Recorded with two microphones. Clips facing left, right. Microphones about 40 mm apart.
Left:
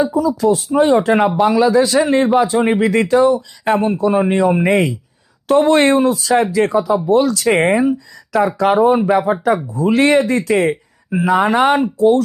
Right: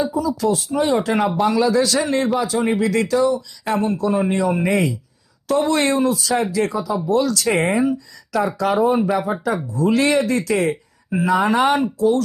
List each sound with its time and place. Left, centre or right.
0.1 s speech: centre
1.4 s speech: centre; by 9.6 s left
9.7 s speech: left